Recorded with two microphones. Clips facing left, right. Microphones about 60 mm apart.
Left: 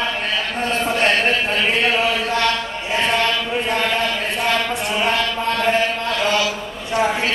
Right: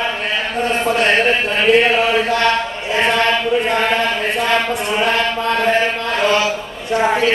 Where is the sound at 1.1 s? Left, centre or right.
Right.